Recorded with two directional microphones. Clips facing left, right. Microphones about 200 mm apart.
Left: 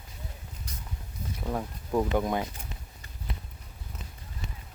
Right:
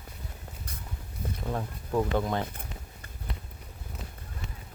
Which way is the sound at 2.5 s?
55° right (ahead or behind).